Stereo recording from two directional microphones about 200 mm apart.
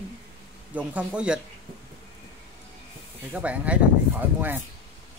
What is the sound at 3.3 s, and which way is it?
Speech, 5° right (ahead or behind).